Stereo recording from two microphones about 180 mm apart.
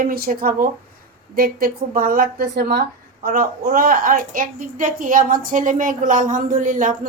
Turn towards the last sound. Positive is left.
turn(degrees=-45)  # may be behind; listen again after turning